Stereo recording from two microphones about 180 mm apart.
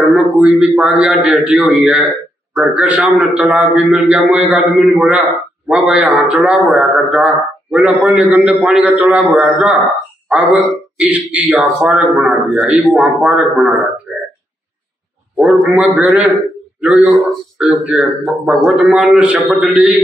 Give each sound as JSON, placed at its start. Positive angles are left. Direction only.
{"t": 0.1, "sound": "a man's voice", "side_deg": -5}
{"t": 15.3, "sound": "a man's voice", "side_deg": -5}